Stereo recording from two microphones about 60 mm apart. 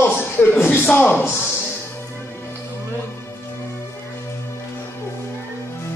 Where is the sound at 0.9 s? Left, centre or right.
Left.